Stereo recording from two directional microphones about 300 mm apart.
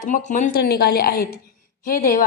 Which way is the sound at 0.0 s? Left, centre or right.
Left.